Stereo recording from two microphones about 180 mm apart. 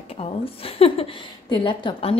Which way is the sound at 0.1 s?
30° left (ahead or behind).